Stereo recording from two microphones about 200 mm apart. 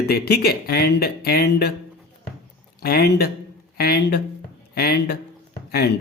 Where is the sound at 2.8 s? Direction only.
50° left (ahead or behind).